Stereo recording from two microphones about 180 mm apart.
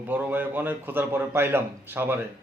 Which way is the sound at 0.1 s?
10° right (ahead or behind).